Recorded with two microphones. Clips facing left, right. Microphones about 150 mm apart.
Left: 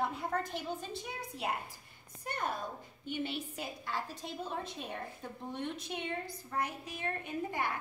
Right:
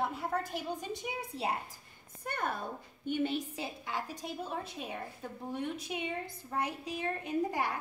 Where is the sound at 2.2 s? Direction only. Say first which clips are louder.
Right 1 dB; 55° right (ahead or behind).